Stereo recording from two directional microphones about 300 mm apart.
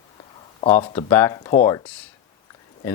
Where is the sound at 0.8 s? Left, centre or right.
Centre.